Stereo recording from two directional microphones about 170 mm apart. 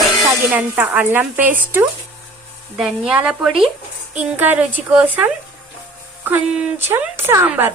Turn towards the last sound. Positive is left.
turn(degrees=-10)  # may be behind; listen again after turning